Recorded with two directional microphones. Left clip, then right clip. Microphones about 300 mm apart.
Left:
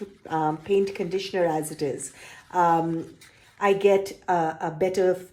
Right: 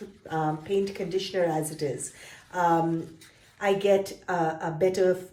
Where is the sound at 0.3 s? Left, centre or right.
Left.